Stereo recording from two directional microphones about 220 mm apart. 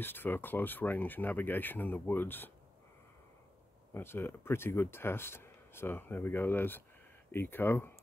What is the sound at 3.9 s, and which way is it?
Speech, 10° left (ahead or behind).